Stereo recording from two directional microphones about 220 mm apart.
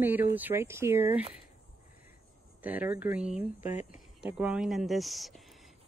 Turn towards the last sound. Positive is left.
turn(degrees=0)  # may be behind; listen again after turning